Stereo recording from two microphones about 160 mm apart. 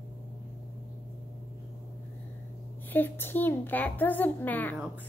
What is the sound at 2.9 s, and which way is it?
A child's voice, 15° left (ahead or behind).